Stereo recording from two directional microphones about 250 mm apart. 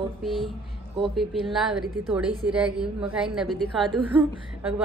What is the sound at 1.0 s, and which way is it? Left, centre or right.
A woman's voice, centre.